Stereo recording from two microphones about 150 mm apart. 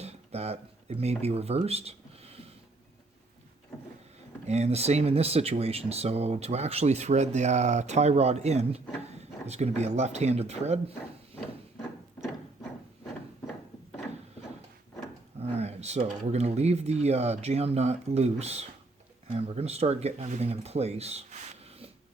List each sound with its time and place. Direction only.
0.0 s speech: 45° right (ahead or behind)
4.4 s speech: 45° right (ahead or behind)
15.4 s speech: 45° right (ahead or behind)